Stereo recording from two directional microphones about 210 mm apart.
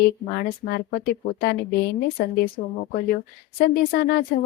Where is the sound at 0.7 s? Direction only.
45° left (ahead or behind).